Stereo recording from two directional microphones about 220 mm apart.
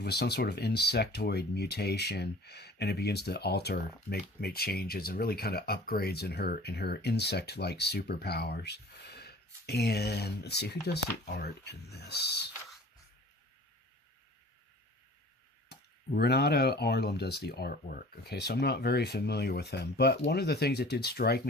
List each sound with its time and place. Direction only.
0.0 s speech: 50° left (ahead or behind)
15.7 s speech: 45° left (ahead or behind)